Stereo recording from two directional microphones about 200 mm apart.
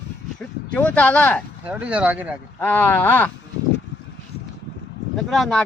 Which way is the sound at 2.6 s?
10° left (ahead or behind).